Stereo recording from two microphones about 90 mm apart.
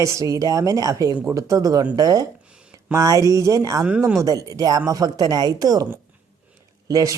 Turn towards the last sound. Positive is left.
turn(degrees=-40)  # may be behind; listen again after turning